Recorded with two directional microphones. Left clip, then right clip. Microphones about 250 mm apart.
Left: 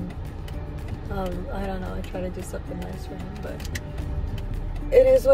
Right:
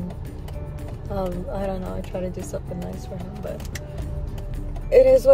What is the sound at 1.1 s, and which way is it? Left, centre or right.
Speech, centre.